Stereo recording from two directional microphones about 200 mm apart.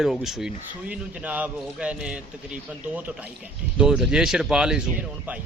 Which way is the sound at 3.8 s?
5° right (ahead or behind).